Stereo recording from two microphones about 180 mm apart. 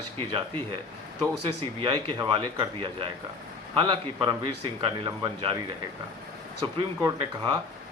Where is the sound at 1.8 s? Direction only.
25° right (ahead or behind).